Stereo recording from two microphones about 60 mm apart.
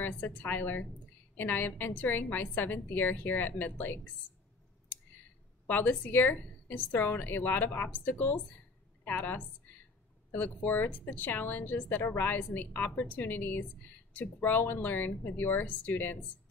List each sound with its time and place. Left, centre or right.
0.0 s a woman's voice: left
5.7 s a woman's voice: left